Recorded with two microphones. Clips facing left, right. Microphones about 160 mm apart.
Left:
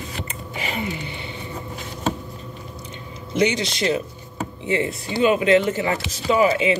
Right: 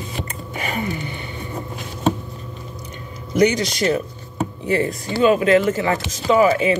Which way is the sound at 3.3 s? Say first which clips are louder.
Right 4 dB; 25° left (ahead or behind).